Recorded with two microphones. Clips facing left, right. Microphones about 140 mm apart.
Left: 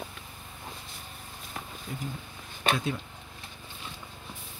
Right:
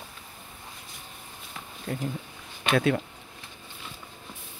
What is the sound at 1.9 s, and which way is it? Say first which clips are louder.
Speech: right 8 dB; 55° right (ahead or behind).